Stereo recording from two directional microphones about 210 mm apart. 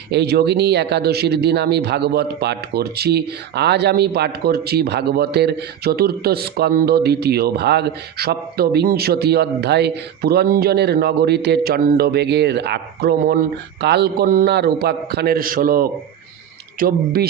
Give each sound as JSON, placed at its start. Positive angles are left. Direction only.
{"t": 0.1, "sound": "speech", "side_deg": -50}